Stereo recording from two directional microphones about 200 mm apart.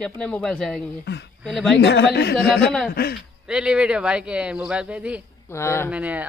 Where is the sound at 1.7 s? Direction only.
55° left (ahead or behind).